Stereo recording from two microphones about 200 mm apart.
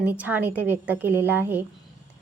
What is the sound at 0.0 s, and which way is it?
A woman's voice, 10° right (ahead or behind).